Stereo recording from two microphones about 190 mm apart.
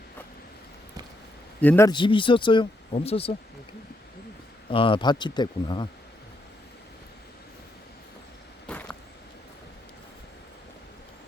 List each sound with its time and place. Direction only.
1.6 s a man's voice: 10° left (ahead or behind)
1.9 s speech: 25° left (ahead or behind)
4.7 s speech: 25° left (ahead or behind)
8.6 s a sound: 5° left (ahead or behind)